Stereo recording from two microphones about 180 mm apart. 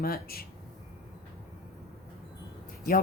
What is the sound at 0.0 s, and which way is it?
Speech, 55° left (ahead or behind).